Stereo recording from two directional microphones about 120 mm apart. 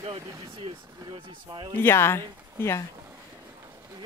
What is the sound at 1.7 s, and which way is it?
Speech, 20° left (ahead or behind).